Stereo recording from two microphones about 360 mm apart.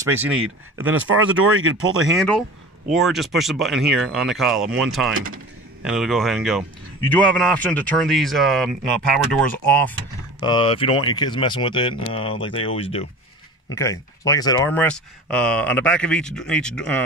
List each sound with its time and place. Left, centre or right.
0.0 s speech: centre
0.7 s speech: right
2.1 s speech: centre